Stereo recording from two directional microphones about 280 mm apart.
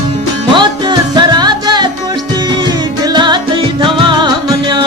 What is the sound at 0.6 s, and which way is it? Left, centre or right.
Music, centre.